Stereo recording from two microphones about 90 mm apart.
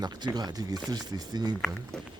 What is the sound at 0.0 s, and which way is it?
Speech, 50° right (ahead or behind).